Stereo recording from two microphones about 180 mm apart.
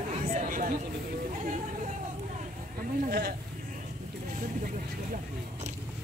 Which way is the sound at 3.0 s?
60° right (ahead or behind).